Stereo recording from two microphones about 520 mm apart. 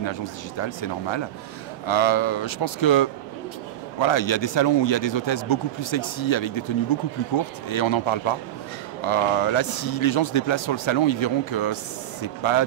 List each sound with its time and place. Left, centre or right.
0.0 s speech: left